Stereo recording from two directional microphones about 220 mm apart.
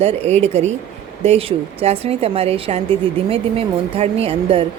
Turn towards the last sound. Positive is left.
turn(degrees=-25)  # may be behind; listen again after turning